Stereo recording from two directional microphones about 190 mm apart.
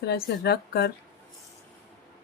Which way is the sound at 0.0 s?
60° left (ahead or behind).